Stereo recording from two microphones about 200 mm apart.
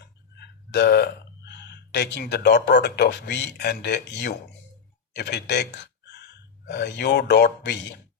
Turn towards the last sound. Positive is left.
turn(degrees=60)  # may be behind; listen again after turning